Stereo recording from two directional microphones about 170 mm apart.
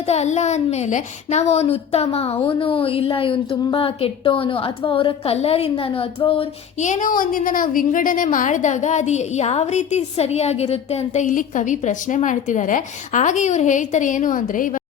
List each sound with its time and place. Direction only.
0.0 s speech: 40° left (ahead or behind)
6.8 s a woman's voice: 50° left (ahead or behind)